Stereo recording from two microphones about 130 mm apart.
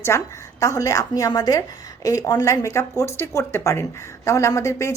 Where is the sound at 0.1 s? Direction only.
20° left (ahead or behind).